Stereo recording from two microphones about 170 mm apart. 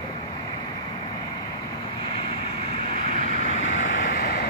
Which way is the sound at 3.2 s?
40° left (ahead or behind).